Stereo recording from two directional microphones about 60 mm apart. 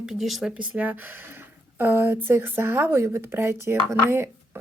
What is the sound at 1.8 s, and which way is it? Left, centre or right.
Speech, right.